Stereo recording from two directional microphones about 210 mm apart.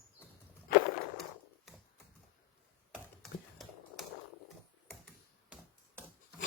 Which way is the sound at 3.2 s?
Centre (ahead or behind).